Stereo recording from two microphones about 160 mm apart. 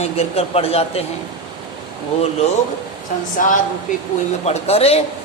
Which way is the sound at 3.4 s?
55° left (ahead or behind).